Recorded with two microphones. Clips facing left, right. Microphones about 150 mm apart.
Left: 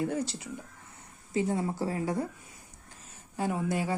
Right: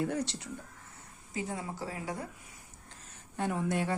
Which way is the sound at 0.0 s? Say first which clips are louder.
Left 2 dB; centre (ahead or behind).